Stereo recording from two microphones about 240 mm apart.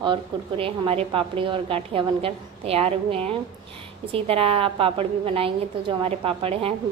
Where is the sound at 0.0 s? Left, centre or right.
Right.